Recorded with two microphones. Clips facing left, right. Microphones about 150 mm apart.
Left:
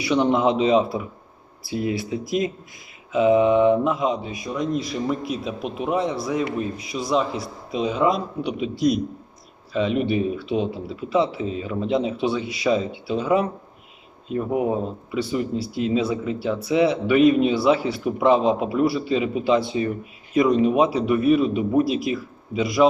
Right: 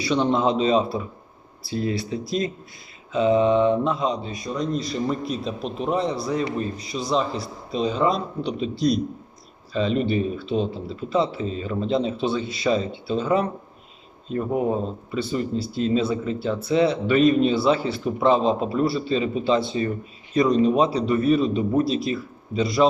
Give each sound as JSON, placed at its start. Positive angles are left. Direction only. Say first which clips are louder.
{"t": 0.0, "sound": "speech", "louder": "left 2 dB", "side_deg": 15}